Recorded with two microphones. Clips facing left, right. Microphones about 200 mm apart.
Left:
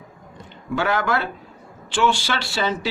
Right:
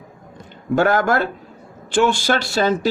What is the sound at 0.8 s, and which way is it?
Speech, 45° right (ahead or behind).